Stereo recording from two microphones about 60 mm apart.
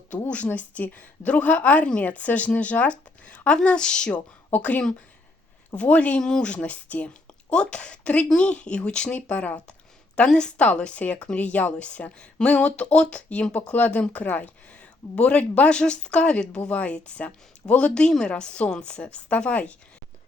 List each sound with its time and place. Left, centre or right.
0.3 s a woman's voice: left